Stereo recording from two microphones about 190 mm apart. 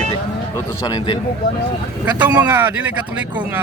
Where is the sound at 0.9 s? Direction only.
25° left (ahead or behind).